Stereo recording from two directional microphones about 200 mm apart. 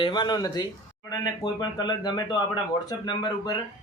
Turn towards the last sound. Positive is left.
turn(degrees=20)  # may be behind; listen again after turning